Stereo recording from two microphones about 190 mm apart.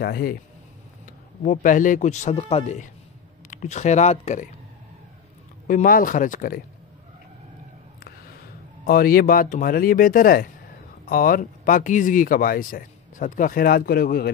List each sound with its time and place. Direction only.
0.0 s a man's voice: 55° left (ahead or behind)
1.4 s a man's voice: 45° left (ahead or behind)
5.7 s speech: 45° left (ahead or behind)
8.8 s speech: 50° left (ahead or behind)